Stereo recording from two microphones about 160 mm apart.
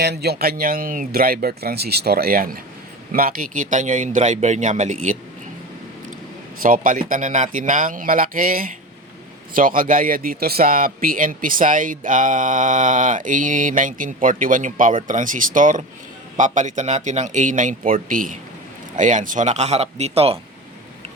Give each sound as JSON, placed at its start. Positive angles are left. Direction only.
{"t": 0.0, "sound": "speech", "side_deg": -90}
{"t": 7.1, "sound": "a man's voice", "side_deg": -55}